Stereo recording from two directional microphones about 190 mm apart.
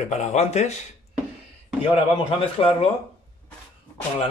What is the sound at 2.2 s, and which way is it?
Speech, 30° left (ahead or behind).